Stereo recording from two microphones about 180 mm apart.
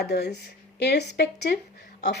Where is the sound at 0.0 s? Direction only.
65° left (ahead or behind).